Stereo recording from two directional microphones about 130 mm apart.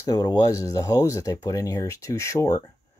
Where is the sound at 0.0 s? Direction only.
30° left (ahead or behind).